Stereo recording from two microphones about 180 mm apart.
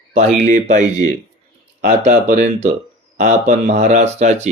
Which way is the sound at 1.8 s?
65° right (ahead or behind).